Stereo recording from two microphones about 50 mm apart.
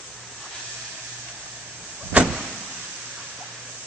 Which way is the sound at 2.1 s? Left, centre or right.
Right.